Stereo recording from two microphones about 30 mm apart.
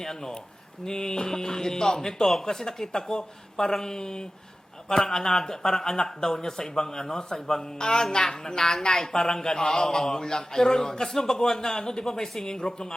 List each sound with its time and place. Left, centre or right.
0.0 s a woman's voice: centre